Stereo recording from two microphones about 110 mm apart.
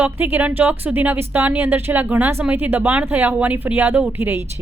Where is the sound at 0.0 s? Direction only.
20° right (ahead or behind).